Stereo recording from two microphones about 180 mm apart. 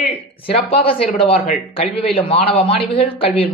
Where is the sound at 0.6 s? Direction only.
30° left (ahead or behind).